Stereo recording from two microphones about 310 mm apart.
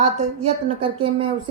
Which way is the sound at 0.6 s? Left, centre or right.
Centre.